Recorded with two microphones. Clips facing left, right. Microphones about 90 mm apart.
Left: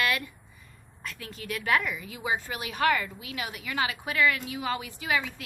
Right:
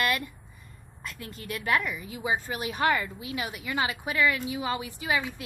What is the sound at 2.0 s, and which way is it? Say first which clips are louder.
A woman's voice: right 1 dB; 25° right (ahead or behind).